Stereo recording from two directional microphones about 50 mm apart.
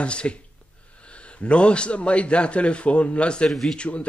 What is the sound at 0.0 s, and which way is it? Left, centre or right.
Speech, left.